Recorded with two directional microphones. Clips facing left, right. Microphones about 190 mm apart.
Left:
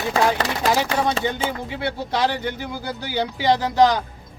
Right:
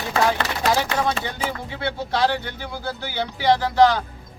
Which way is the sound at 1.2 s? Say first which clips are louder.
Left 4 dB; 20° left (ahead or behind).